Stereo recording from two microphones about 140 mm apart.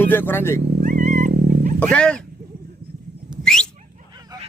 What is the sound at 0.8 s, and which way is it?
Cat, 65° right (ahead or behind).